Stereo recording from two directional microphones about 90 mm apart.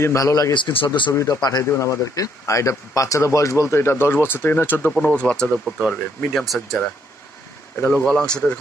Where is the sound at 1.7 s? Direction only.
35° left (ahead or behind); by 6.3 s 15° left (ahead or behind).